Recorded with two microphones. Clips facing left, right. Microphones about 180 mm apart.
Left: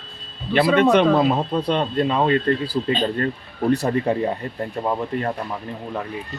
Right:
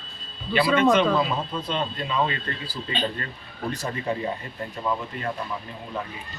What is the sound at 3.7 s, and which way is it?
Speech, 60° left (ahead or behind).